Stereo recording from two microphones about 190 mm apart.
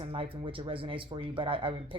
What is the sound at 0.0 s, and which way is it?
A woman's voice, 30° right (ahead or behind).